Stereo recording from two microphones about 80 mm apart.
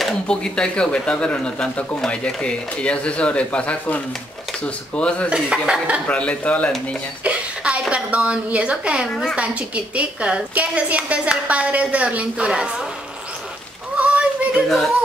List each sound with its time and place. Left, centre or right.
0.0 s speech: centre
5.3 s a woman's voice: centre
6.0 s speech: centre
7.2 s a sound: centre
7.9 s a woman's voice: centre
13.9 s honk: centre